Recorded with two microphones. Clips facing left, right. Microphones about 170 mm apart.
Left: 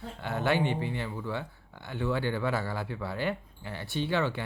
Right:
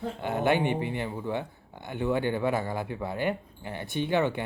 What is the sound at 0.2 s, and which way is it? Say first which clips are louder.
Speech: right 2 dB; 15° right (ahead or behind).